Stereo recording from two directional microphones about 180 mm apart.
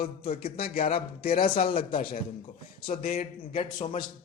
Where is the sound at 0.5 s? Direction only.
55° left (ahead or behind).